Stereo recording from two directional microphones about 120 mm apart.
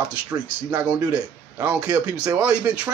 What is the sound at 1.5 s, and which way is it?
Speech, 15° right (ahead or behind).